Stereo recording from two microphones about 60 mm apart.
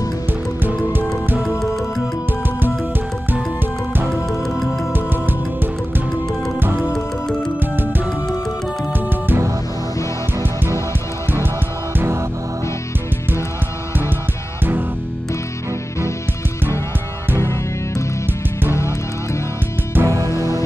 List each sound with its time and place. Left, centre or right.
0.3 s music: right
1.6 s music: centre
4.9 s music: right
6.8 s music: centre
7.7 s music: right
17.4 s music: left
19.9 s music: right
20.2 s music: left